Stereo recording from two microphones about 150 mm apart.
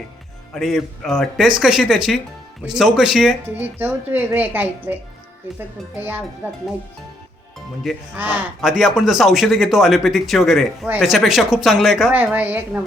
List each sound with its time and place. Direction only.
0.5 s a woman's voice: centre (ahead or behind)
8.1 s speech: 10° right (ahead or behind)